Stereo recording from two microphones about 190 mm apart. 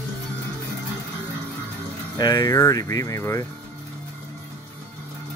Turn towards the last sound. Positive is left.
turn(degrees=15)  # may be behind; listen again after turning